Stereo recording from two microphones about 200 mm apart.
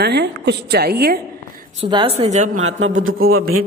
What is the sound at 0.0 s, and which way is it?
Speech, 55° right (ahead or behind).